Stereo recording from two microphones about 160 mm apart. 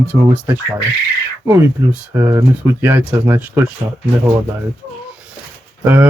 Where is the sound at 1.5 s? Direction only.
15° right (ahead or behind).